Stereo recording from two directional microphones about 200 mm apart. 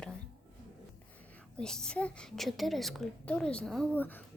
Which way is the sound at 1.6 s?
5° left (ahead or behind).